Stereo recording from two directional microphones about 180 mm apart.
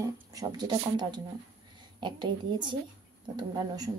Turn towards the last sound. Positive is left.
turn(degrees=-20)  # may be behind; listen again after turning